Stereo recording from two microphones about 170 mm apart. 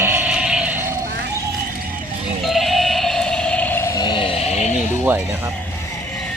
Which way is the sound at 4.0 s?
25° left (ahead or behind).